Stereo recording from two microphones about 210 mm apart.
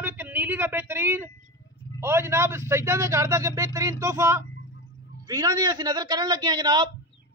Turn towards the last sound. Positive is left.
turn(degrees=-20)  # may be behind; listen again after turning